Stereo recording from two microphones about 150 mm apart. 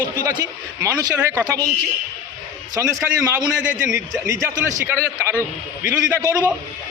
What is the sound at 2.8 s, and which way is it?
A man's voice, 15° right (ahead or behind).